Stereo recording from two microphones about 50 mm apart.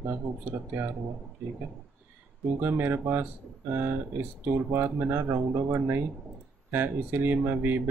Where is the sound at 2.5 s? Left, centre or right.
Right.